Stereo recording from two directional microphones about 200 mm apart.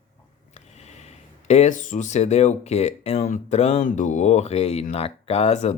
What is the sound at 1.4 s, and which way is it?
Speech, 35° left (ahead or behind).